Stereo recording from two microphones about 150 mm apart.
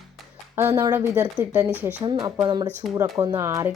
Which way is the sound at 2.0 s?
30° right (ahead or behind).